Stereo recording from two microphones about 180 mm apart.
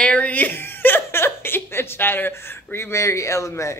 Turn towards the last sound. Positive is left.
turn(degrees=15)  # may be behind; listen again after turning